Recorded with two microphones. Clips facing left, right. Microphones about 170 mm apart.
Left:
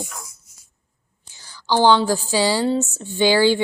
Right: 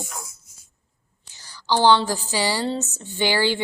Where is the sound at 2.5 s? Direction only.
10° left (ahead or behind).